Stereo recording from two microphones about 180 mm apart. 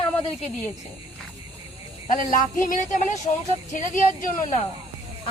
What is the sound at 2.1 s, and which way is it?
Speech, 50° left (ahead or behind).